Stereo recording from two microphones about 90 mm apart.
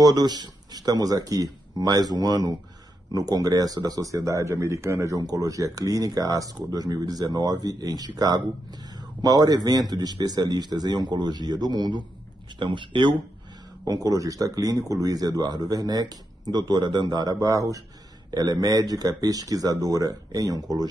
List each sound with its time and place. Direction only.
0.0 s speech: 50° right (ahead or behind)
9.2 s speech: 45° right (ahead or behind); by 13.1 s 65° right (ahead or behind)
13.8 s speech: 40° right (ahead or behind)